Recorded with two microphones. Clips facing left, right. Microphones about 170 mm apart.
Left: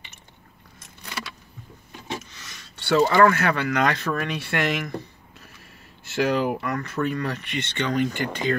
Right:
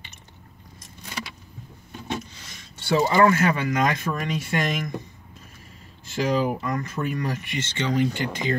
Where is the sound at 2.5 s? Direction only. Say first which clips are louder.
Left 1 dB; 70° left (ahead or behind).